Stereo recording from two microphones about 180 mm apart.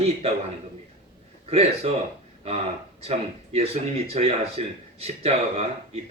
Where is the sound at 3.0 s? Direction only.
35° right (ahead or behind).